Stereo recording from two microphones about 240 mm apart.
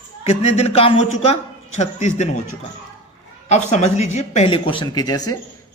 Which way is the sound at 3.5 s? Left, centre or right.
Left.